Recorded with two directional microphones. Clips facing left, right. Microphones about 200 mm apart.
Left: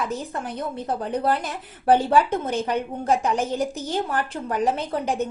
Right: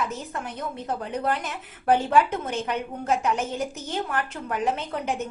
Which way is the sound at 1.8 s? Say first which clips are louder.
Left 2 dB; 30° left (ahead or behind).